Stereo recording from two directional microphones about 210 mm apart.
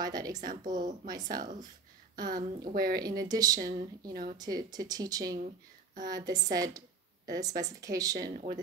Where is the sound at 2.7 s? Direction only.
45° right (ahead or behind).